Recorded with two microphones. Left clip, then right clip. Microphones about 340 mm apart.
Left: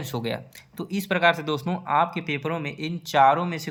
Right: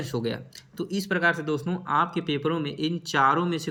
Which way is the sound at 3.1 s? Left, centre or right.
Left.